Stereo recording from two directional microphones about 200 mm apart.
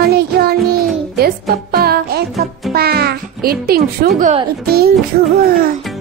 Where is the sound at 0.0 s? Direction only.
50° right (ahead or behind).